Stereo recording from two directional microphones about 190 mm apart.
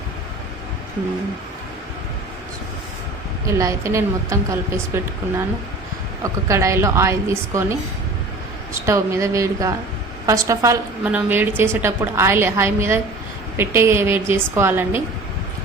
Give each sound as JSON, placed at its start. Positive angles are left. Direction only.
{"t": 3.4, "sound": "a woman's voice", "side_deg": -15}
{"t": 6.2, "sound": "a woman's voice", "side_deg": -15}
{"t": 8.9, "sound": "a woman's voice", "side_deg": -15}